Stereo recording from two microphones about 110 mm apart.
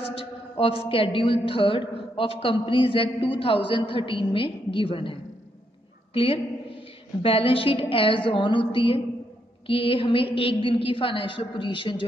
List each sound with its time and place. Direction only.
0.0 s a woman's voice: 60° left (ahead or behind)